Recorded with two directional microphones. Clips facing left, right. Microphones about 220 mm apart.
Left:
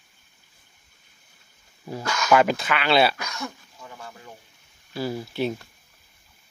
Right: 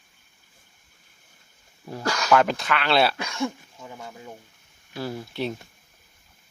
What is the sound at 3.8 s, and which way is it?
Speech, 15° right (ahead or behind).